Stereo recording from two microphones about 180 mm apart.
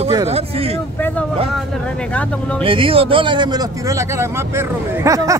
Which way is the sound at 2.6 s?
30° right (ahead or behind).